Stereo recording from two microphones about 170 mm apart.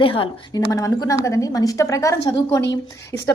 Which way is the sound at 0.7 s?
20° left (ahead or behind).